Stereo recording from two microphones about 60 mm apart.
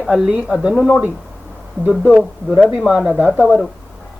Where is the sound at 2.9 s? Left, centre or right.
Centre.